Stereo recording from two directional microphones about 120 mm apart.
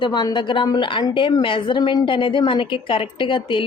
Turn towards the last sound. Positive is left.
turn(degrees=45)  # may be behind; listen again after turning